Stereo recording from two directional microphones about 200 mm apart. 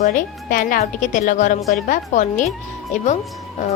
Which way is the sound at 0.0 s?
40° left (ahead or behind).